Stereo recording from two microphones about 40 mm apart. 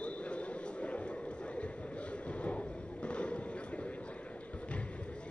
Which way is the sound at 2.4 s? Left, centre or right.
Left.